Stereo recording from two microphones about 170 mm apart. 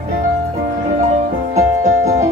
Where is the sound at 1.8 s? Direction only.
40° right (ahead or behind).